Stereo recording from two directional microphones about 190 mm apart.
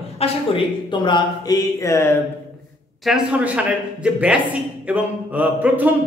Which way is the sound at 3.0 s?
5° right (ahead or behind).